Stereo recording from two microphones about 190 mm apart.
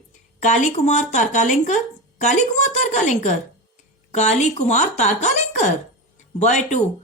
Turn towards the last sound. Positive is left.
turn(degrees=40)  # may be behind; listen again after turning